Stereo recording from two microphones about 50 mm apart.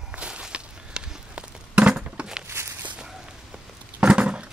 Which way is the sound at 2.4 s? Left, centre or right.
Right.